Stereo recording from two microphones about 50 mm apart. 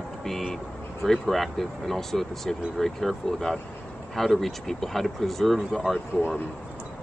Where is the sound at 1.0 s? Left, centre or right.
Centre.